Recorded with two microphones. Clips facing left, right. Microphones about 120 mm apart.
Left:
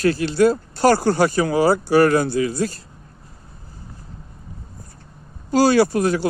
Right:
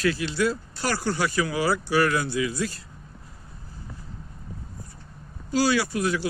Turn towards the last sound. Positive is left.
turn(degrees=40)  # may be behind; listen again after turning